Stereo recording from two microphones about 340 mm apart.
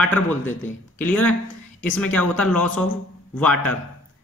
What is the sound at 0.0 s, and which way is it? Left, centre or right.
Speech, centre.